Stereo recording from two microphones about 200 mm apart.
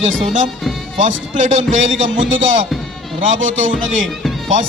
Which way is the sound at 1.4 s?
40° right (ahead or behind).